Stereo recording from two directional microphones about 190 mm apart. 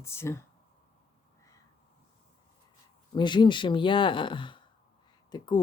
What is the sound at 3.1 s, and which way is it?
Speech, 25° left (ahead or behind).